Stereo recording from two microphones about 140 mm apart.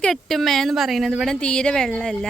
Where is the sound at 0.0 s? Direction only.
Centre (ahead or behind).